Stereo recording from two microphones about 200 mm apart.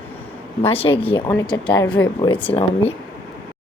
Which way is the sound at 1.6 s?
25° left (ahead or behind).